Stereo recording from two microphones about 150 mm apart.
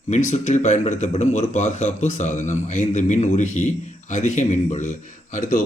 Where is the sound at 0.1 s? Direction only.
50° left (ahead or behind).